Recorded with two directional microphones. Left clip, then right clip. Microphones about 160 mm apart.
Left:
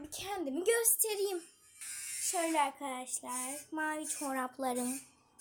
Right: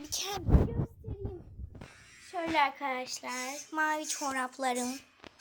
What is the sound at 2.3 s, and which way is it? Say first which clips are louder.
A woman's voice: right 3 dB; 10° left (ahead or behind).